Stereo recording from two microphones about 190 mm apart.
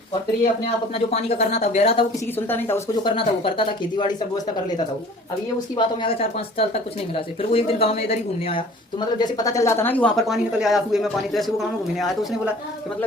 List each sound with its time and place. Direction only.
0.6 s speech: 35° left (ahead or behind)
2.5 s a woman's voice: 10° left (ahead or behind)
3.0 s speech: 30° left (ahead or behind)
5.7 s speech: 30° left (ahead or behind)
9.1 s speech: 20° left (ahead or behind); by 12.1 s centre (ahead or behind)